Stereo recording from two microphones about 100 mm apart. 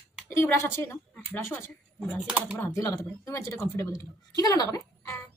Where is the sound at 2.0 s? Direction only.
5° left (ahead or behind).